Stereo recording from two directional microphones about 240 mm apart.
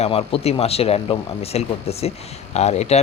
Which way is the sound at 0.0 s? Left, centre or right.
Left.